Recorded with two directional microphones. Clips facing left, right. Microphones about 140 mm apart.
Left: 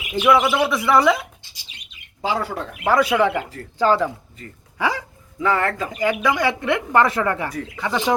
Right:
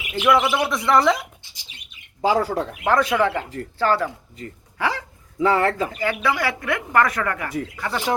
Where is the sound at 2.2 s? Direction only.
40° right (ahead or behind).